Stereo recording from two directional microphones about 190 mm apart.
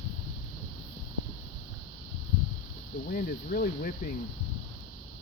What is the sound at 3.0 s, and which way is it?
Speech, 50° left (ahead or behind).